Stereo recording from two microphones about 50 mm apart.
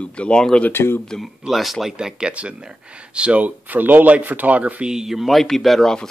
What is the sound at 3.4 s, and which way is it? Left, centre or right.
Speech, right.